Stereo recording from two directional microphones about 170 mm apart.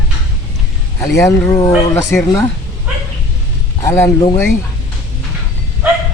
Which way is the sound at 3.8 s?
15° left (ahead or behind).